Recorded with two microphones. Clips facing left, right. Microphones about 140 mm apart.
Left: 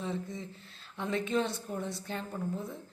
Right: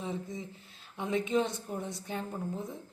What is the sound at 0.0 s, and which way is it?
Speech, 15° right (ahead or behind).